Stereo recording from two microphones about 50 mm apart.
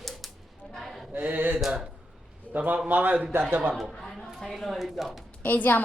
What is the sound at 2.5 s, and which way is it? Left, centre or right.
Speech, right.